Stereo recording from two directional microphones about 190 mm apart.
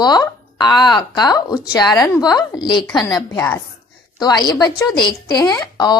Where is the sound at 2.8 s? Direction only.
Centre (ahead or behind).